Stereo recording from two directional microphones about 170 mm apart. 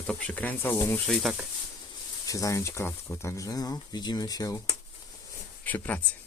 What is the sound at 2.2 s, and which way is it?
Speech, 20° left (ahead or behind).